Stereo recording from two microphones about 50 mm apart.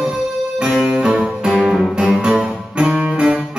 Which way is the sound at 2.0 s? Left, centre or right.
Centre.